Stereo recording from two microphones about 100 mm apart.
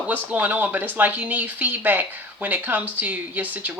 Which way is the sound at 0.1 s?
15° right (ahead or behind).